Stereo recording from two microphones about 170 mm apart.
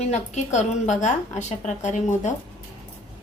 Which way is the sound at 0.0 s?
40° left (ahead or behind).